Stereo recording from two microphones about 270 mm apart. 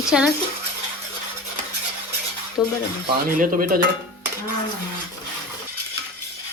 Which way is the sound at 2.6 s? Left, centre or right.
Centre.